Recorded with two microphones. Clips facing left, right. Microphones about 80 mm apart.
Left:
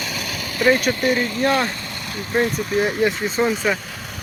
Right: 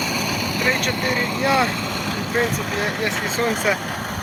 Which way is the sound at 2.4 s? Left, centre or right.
Right.